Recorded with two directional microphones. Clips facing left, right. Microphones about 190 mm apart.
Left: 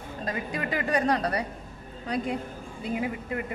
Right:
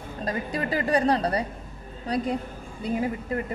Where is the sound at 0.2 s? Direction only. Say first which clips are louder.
Right 3 dB; 35° right (ahead or behind).